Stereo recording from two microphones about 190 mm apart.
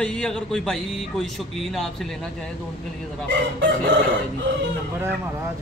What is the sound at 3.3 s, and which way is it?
Chicken, 70° right (ahead or behind).